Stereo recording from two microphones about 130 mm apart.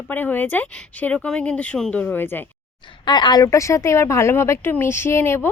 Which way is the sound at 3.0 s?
35° left (ahead or behind).